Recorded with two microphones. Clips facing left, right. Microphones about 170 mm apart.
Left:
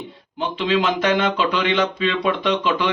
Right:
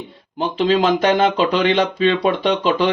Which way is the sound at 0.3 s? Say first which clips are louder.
Right 4 dB; 40° right (ahead or behind).